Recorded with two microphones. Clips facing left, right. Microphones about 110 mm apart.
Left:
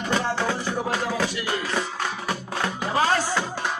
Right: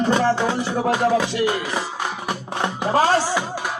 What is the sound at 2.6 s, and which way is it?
Music, 30° right (ahead or behind).